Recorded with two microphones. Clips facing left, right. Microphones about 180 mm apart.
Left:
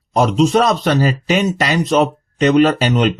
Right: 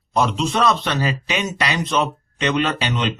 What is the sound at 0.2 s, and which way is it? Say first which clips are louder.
Speech: left 6 dB; 45° left (ahead or behind).